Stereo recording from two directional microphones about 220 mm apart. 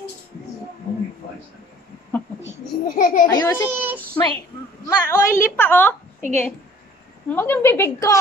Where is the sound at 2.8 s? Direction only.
40° left (ahead or behind).